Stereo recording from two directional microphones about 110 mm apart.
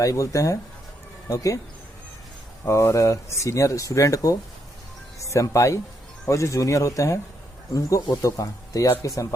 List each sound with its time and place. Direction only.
0.0 s speech: 30° left (ahead or behind)
2.6 s speech: 25° left (ahead or behind)